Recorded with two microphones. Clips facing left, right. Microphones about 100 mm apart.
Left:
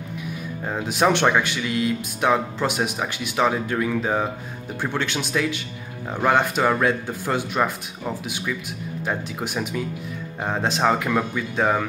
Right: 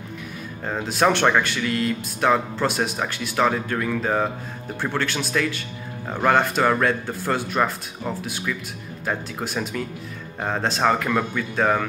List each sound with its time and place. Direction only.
0.7 s speech: 15° left (ahead or behind)